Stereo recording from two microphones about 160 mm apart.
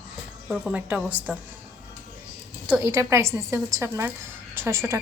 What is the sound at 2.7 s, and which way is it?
A woman's voice, 15° right (ahead or behind).